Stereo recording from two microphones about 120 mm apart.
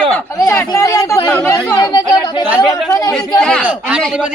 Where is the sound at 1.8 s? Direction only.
35° left (ahead or behind).